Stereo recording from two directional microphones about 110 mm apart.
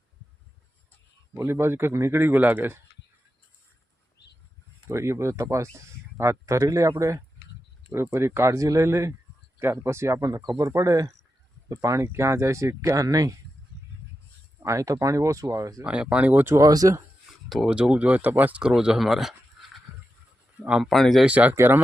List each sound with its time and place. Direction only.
1.4 s speech: 20° right (ahead or behind)
4.9 s speech: 25° right (ahead or behind)
14.6 s speech: 30° right (ahead or behind)
15.8 s speech: 10° right (ahead or behind)
16.6 s speech: 35° right (ahead or behind)
17.5 s speech: 5° right (ahead or behind)
20.6 s speech: 10° right (ahead or behind)
20.9 s speech: centre (ahead or behind)
21.2 s speech: 15° right (ahead or behind)